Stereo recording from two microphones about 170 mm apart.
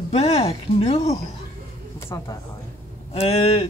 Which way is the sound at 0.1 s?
35° left (ahead or behind).